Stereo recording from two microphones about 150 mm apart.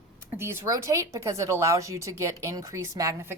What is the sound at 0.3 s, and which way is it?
Speech, 15° right (ahead or behind).